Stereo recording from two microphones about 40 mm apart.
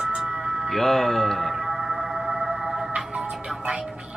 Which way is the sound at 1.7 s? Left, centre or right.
Centre.